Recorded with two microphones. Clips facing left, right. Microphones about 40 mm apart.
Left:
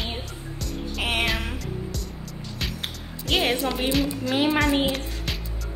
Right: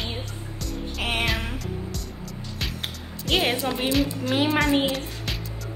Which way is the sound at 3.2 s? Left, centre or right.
Centre.